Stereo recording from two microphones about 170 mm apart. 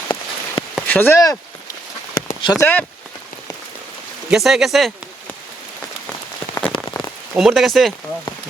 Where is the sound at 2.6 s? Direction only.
10° left (ahead or behind).